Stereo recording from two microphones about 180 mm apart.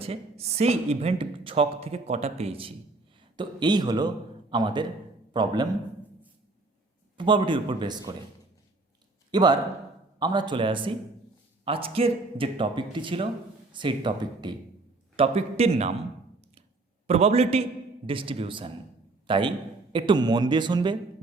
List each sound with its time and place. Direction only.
0.0 s a woman's voice: 35° right (ahead or behind)
7.2 s a man's voice: 25° right (ahead or behind)
9.3 s a man's voice: 25° right (ahead or behind)
17.1 s a woman's voice: 35° right (ahead or behind)